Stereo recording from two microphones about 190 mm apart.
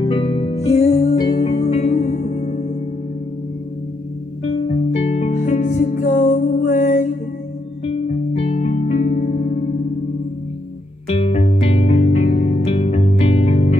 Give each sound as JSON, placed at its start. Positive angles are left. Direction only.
{"t": 0.0, "sound": "music", "side_deg": 25}
{"t": 1.1, "sound": "music", "side_deg": 20}
{"t": 1.4, "sound": "music", "side_deg": 35}
{"t": 4.6, "sound": "music", "side_deg": 35}
{"t": 11.1, "sound": "music", "side_deg": 30}